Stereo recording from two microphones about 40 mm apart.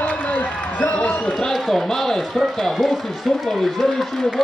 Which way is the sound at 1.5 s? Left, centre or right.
Centre.